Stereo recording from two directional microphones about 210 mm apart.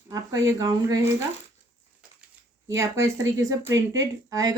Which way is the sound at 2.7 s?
15° right (ahead or behind).